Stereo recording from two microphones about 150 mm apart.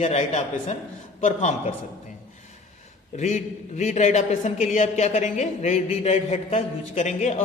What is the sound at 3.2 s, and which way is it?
A man's voice, 50° left (ahead or behind).